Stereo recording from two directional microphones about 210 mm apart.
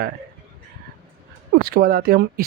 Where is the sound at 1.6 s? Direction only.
45° right (ahead or behind).